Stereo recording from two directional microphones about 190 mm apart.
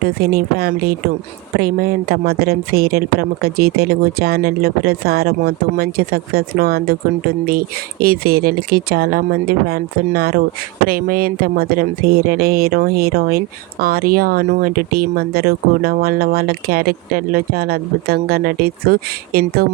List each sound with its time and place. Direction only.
0.0 s speech: 55° right (ahead or behind)